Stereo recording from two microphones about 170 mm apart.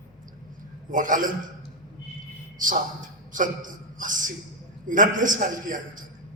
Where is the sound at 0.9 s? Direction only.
50° right (ahead or behind).